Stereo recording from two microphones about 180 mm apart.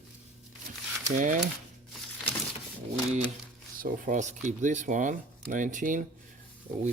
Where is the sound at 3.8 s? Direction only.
50° right (ahead or behind).